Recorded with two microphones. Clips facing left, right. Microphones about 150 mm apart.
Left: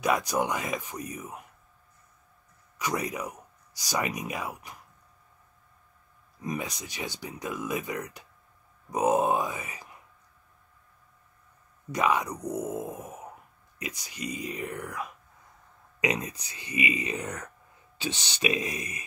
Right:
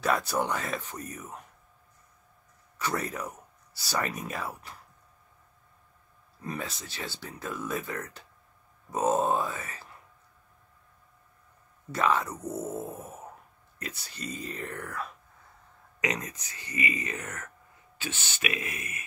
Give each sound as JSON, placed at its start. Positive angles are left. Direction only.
{"t": 0.0, "sound": "speech", "side_deg": 15}
{"t": 2.8, "sound": "speech", "side_deg": 15}
{"t": 6.4, "sound": "speech", "side_deg": 15}
{"t": 11.9, "sound": "speech", "side_deg": 15}